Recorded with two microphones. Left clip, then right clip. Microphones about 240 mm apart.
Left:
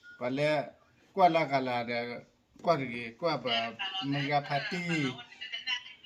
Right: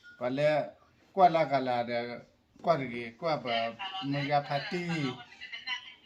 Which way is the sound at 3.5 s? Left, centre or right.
Centre.